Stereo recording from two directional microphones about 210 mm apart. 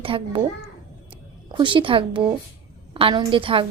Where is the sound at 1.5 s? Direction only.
25° right (ahead or behind).